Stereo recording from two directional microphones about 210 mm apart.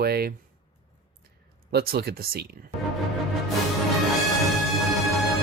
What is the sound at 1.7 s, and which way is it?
Speech, 45° right (ahead or behind).